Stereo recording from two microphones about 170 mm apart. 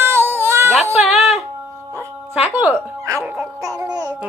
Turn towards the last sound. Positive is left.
turn(degrees=-20)  # may be behind; listen again after turning